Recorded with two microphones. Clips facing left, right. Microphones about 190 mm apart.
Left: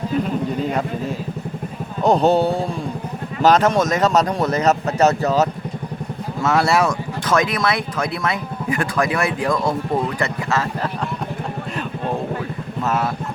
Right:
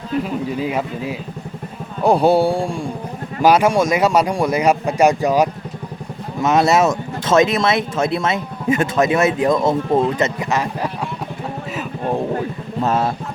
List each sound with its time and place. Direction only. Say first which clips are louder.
0.5 s speech: even; 5° right (ahead or behind); by 10.6 s 20° right (ahead or behind)
12.8 s speech: right 3 dB; 30° right (ahead or behind)